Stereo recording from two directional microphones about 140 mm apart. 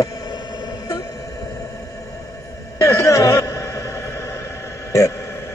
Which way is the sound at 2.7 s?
20° left (ahead or behind).